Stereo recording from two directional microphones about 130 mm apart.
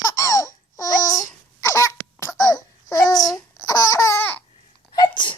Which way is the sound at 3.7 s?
25° left (ahead or behind).